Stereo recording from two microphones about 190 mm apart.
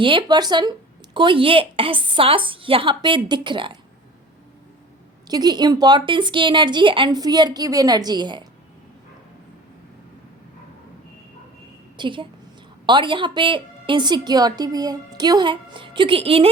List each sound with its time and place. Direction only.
0.0 s a woman's voice: 25° right (ahead or behind)
5.3 s a woman's voice: 20° right (ahead or behind)
11.9 s a woman's voice: 25° right (ahead or behind)